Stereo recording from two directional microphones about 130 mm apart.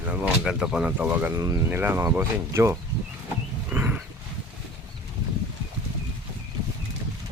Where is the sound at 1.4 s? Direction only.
25° right (ahead or behind).